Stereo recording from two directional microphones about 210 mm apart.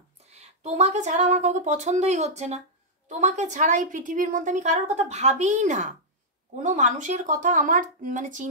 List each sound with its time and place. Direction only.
0.3 s a woman's voice: 30° right (ahead or behind)